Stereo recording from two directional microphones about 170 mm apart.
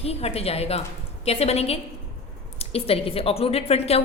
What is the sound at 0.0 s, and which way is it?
A woman's voice, 35° left (ahead or behind).